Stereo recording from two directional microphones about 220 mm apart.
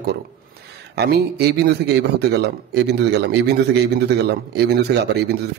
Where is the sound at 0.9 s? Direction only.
50° right (ahead or behind).